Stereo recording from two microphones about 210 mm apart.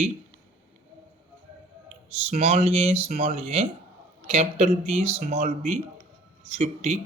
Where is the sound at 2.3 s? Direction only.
30° right (ahead or behind).